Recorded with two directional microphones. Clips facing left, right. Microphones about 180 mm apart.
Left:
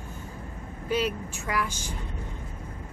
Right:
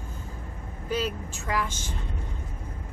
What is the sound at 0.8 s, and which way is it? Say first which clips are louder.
Speech: left 2 dB; 10° left (ahead or behind).